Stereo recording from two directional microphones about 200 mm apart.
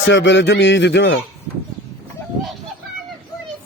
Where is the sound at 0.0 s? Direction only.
65° left (ahead or behind).